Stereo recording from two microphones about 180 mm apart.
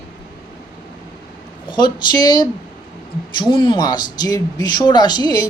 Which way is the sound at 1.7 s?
25° left (ahead or behind).